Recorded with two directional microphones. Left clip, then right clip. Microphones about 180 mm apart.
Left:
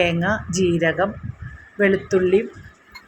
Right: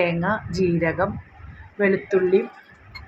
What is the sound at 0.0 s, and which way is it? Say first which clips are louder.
A woman's voice: left 2 dB; 20° left (ahead or behind).